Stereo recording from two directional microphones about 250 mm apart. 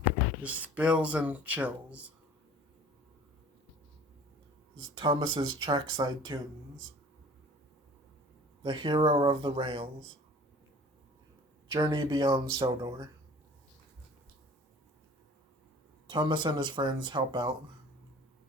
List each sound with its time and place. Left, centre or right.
0.4 s speech: centre
4.9 s speech: centre
8.6 s speech: centre
11.7 s speech: centre
16.0 s speech: centre